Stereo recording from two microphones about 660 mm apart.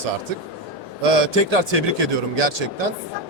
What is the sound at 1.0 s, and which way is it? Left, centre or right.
Speech, right.